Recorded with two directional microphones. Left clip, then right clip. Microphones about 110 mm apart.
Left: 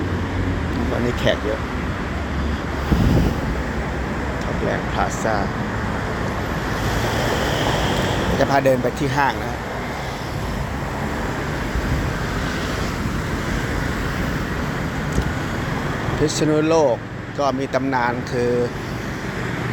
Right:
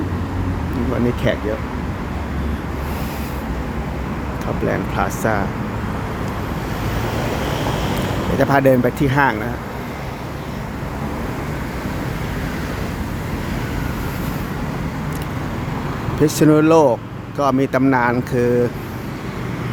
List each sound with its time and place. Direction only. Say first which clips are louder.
4.9 s speech: right 1 dB; 60° right (ahead or behind)
8.4 s speech: right 3 dB; 50° right (ahead or behind)
16.2 s speech: right 5 dB; 60° right (ahead or behind)